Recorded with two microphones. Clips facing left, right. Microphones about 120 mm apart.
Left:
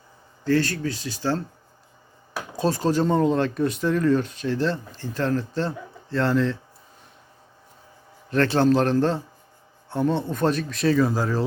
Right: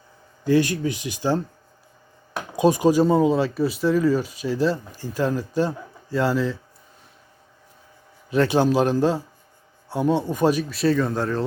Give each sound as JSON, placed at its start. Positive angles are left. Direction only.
{"t": 0.4, "sound": "speech", "side_deg": -15}
{"t": 2.6, "sound": "speech", "side_deg": -15}
{"t": 8.3, "sound": "speech", "side_deg": -10}